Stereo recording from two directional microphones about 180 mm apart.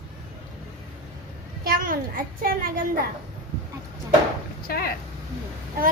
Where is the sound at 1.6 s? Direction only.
50° right (ahead or behind).